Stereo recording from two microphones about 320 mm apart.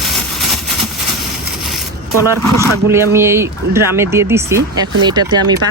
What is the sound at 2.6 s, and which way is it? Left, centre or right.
Speech, centre.